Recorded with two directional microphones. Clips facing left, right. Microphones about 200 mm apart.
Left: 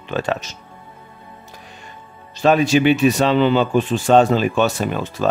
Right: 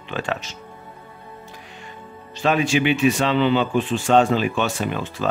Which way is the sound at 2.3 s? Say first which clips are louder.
Left 5 dB; 40° left (ahead or behind).